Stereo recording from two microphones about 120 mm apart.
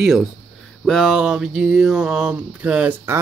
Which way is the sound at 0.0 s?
5° right (ahead or behind).